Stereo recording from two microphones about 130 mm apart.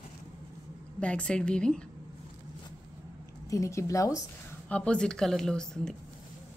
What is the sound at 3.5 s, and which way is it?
Speech, 25° left (ahead or behind).